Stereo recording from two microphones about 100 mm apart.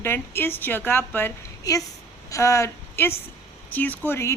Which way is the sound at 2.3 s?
30° left (ahead or behind).